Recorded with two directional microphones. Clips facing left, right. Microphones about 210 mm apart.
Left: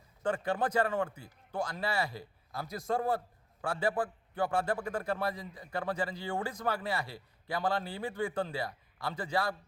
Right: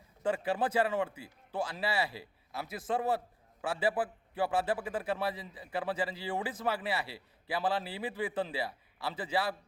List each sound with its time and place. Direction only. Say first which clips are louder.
0.2 s a man's voice: even; 5° right (ahead or behind)